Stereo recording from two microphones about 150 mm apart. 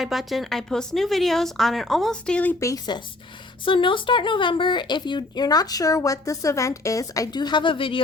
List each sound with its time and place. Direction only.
0.0 s speech: centre (ahead or behind)
2.6 s speech: 25° left (ahead or behind)